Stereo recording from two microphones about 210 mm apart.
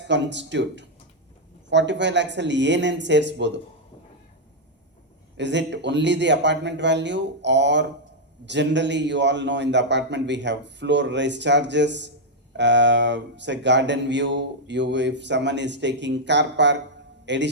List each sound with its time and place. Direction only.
0.0 s speech: 55° right (ahead or behind)
5.4 s speech: 55° right (ahead or behind)